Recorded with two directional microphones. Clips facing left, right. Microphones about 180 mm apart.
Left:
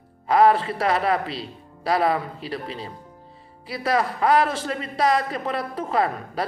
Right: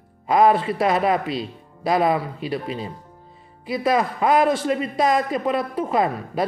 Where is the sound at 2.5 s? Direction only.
15° right (ahead or behind).